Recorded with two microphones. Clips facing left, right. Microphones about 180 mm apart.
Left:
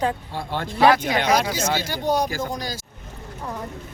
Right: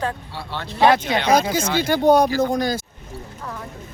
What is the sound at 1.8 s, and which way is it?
Speech, 55° right (ahead or behind).